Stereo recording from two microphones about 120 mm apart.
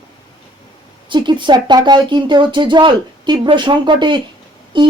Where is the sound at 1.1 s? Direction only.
40° right (ahead or behind).